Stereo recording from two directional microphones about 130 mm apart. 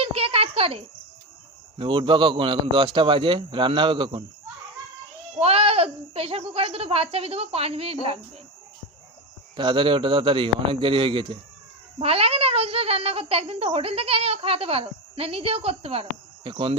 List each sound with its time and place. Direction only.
0.0 s a sound: 50° right (ahead or behind)
1.8 s a man's voice: 40° right (ahead or behind)
5.4 s speech: 50° right (ahead or behind)
9.6 s a man's voice: 40° right (ahead or behind)